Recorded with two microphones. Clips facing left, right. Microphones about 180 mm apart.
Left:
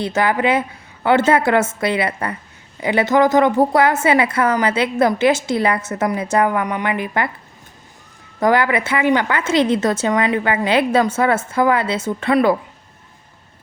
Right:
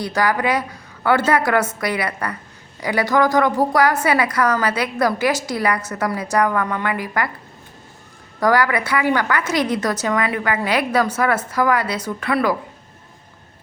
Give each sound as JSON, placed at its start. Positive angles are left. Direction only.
{"t": 0.0, "sound": "a woman's voice", "side_deg": 25}
{"t": 8.4, "sound": "a woman's voice", "side_deg": 20}